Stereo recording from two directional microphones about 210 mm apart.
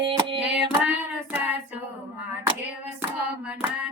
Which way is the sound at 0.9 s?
10° right (ahead or behind).